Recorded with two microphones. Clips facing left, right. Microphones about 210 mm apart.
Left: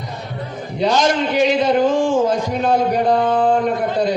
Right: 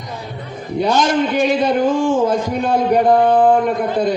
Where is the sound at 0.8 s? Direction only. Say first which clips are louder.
Right 1 dB; 50° right (ahead or behind).